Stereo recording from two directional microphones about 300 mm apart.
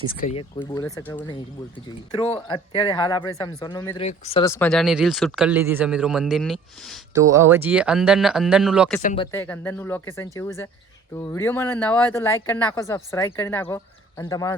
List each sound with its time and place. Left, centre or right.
0.2 s speech: centre
7.1 s speech: centre
9.0 s speech: left
9.2 s speech: centre